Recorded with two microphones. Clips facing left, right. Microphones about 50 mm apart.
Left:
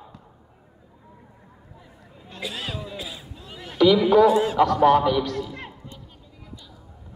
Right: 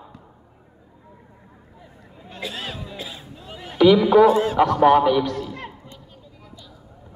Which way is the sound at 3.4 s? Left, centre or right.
Centre.